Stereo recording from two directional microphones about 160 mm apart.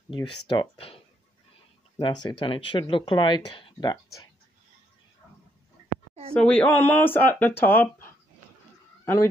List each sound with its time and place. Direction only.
0.1 s speech: 35° left (ahead or behind)
6.3 s speech: 5° left (ahead or behind)